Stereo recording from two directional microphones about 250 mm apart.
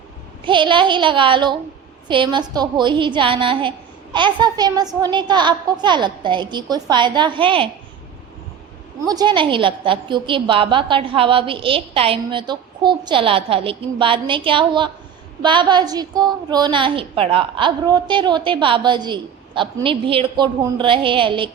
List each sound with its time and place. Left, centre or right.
0.4 s a woman's voice: centre
9.0 s a woman's voice: centre